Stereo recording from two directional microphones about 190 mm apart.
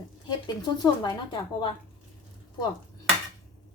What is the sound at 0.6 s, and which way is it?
A woman's voice, 20° left (ahead or behind).